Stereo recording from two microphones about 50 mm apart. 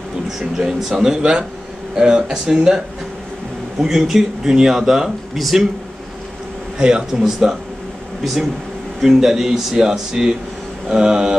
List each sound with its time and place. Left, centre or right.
0.4 s speech: centre
3.8 s speech: centre
6.8 s speech: centre
9.0 s speech: centre